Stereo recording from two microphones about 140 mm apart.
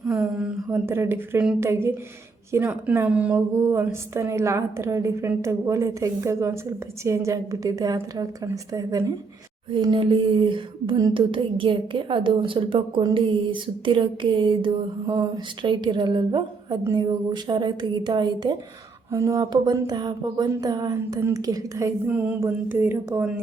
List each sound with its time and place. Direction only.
0.1 s a woman's voice: 10° right (ahead or behind); by 9.1 s 25° right (ahead or behind)
9.7 s a woman's voice: 40° right (ahead or behind); by 23.3 s 15° right (ahead or behind)